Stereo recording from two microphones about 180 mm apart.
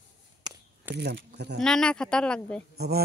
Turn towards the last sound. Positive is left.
turn(degrees=-60)  # may be behind; listen again after turning